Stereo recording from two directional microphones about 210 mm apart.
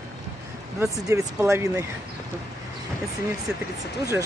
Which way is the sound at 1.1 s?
10° right (ahead or behind).